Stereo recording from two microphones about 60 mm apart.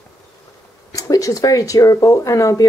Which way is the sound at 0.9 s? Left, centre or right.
Left.